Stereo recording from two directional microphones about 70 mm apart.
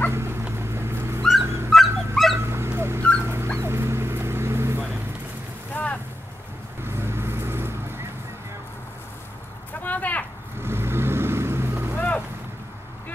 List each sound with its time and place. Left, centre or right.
0.1 s a sound: right
1.4 s dog: right
1.7 s dog: centre
2.4 s dog: right
5.7 s boat: left
6.8 s vehicle: right
9.7 s a sound: left
10.6 s vehicle: right
11.9 s boat: left